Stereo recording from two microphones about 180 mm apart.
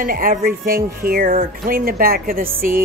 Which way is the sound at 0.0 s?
50° right (ahead or behind).